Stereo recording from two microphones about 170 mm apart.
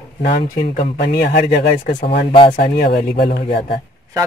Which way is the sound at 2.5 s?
65° left (ahead or behind).